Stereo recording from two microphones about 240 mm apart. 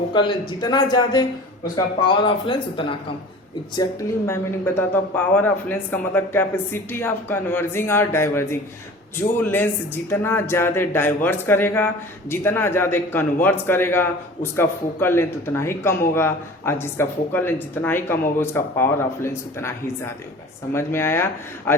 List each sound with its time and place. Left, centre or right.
0.1 s speech: centre
4.3 s a man's voice: centre
20.7 s a man's voice: centre